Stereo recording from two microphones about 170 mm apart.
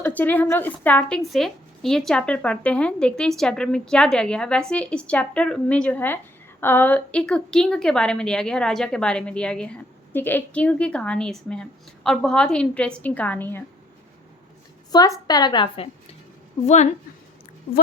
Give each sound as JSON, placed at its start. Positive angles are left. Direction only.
{"t": 0.0, "sound": "a woman's voice", "side_deg": 10}
{"t": 14.9, "sound": "a woman's voice", "side_deg": 20}
{"t": 16.6, "sound": "speech", "side_deg": 45}